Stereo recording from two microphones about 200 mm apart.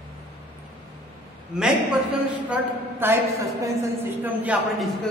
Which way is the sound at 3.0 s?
15° right (ahead or behind).